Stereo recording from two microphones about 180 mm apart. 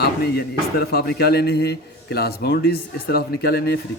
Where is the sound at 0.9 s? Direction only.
60° left (ahead or behind).